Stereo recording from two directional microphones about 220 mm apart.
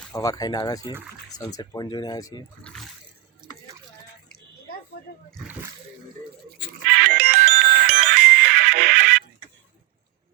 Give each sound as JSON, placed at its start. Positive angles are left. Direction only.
{"t": 0.1, "sound": "speech", "side_deg": 15}
{"t": 6.8, "sound": "music", "side_deg": -40}